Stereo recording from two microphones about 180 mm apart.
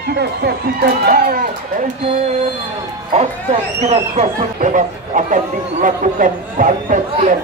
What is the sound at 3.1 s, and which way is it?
Music, 40° right (ahead or behind).